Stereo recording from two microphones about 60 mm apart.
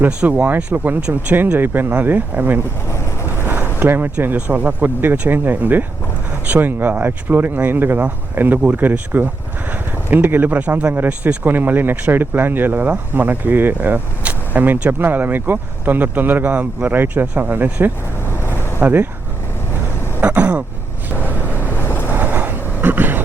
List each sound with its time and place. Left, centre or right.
0.3 s speech: right
3.8 s speech: right
10.9 s speech: right
18.3 s vehicle: left
18.8 s speech: right
20.2 s throat clearing: right
21.1 s vehicle: left
22.1 s vehicle: right